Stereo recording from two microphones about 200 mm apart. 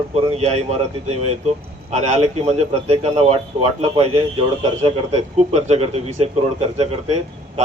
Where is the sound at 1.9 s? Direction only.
35° right (ahead or behind).